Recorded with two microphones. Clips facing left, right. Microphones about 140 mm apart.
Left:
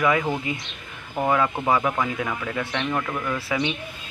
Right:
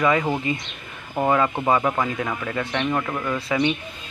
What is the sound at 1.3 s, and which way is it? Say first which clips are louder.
Speech: right 1 dB; centre (ahead or behind).